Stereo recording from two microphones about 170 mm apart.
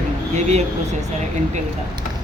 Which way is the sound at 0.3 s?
40° right (ahead or behind).